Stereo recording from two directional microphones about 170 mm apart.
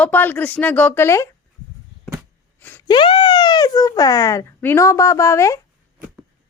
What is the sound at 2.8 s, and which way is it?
Speech, 30° left (ahead or behind).